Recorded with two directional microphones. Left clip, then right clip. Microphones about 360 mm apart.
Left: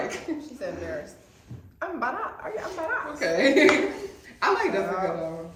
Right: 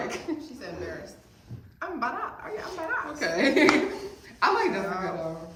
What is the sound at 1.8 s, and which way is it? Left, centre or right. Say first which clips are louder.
Speech: left 2 dB; centre.